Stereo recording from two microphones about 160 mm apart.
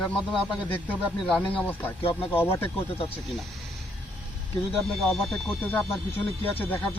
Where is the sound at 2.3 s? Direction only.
15° left (ahead or behind).